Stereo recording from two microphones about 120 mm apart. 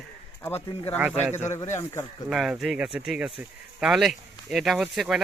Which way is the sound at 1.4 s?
25° left (ahead or behind).